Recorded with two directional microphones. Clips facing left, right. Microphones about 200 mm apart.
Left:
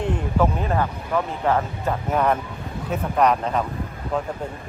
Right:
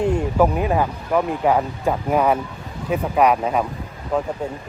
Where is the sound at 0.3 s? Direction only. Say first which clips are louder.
Right 2 dB; 10° right (ahead or behind).